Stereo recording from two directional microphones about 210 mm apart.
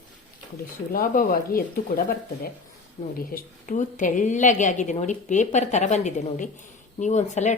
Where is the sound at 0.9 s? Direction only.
40° left (ahead or behind).